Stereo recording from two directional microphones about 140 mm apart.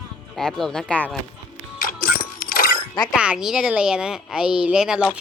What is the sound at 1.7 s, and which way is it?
Music, 90° left.